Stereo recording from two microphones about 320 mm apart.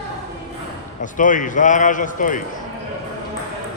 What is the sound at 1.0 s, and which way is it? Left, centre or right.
A man's voice, left.